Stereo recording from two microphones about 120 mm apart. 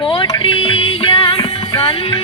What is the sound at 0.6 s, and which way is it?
Music, 50° left (ahead or behind).